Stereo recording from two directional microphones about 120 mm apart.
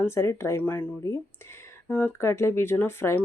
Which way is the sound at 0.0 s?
20° left (ahead or behind).